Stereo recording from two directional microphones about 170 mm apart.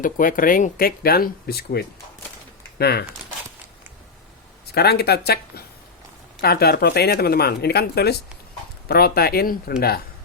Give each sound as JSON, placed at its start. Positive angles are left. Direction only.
{"t": 0.0, "sound": "speech", "side_deg": 55}
{"t": 4.7, "sound": "speech", "side_deg": 70}